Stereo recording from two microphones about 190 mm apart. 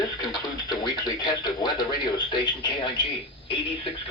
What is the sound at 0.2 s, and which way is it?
Speech, 20° left (ahead or behind).